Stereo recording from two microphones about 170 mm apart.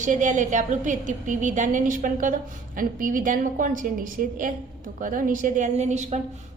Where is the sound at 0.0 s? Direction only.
45° right (ahead or behind).